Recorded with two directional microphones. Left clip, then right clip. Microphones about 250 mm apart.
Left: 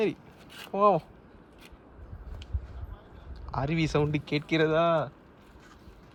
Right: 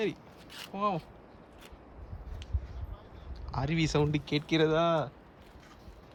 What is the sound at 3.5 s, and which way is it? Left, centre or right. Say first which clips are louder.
Speech: left 2 dB; centre.